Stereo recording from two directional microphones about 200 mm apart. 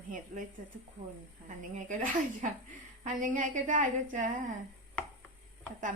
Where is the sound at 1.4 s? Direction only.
40° right (ahead or behind).